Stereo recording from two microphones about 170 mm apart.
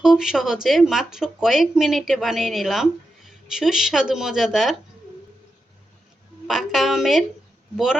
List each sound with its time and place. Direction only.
0.0 s speech: 5° right (ahead or behind)
6.5 s speech: centre (ahead or behind)